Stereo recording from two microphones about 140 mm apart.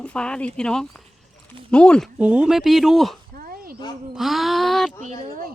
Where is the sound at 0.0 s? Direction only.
10° left (ahead or behind).